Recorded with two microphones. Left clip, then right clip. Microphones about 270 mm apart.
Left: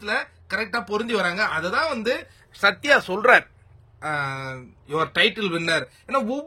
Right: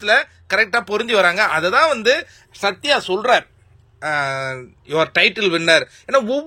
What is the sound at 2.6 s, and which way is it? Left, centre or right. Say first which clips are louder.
Speech: even; centre.